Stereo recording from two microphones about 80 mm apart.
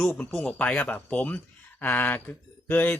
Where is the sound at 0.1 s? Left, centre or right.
Left.